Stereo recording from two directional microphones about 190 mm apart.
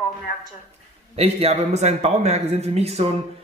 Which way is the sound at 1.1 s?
30° right (ahead or behind).